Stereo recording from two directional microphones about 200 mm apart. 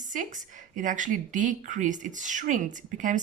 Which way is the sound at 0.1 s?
40° right (ahead or behind).